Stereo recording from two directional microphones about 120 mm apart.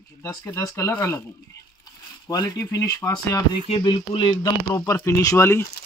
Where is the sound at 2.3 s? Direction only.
30° left (ahead or behind).